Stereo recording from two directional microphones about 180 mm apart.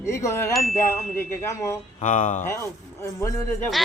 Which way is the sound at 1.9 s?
45° left (ahead or behind).